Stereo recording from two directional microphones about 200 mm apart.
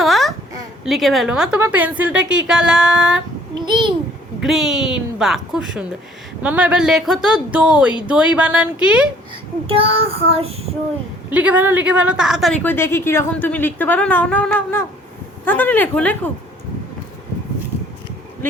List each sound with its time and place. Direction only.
0.0 s a sound: centre (ahead or behind)
0.9 s speech: centre (ahead or behind)
3.7 s child singing: 25° right (ahead or behind)
4.4 s speech: centre (ahead or behind)
9.6 s child singing: 30° right (ahead or behind)
11.3 s a woman's voice: 10° right (ahead or behind); by 16.3 s 10° left (ahead or behind)